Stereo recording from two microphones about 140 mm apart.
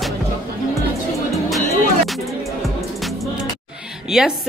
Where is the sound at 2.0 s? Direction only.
Centre (ahead or behind).